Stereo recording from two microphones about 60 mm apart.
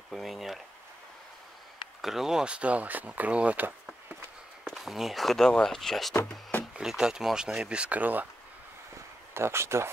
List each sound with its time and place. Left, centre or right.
0.1 s a sound: centre
2.0 s speech: centre; by 3.6 s right
4.6 s speech: centre
6.8 s speech: centre; by 8.3 s right
9.3 s speech: right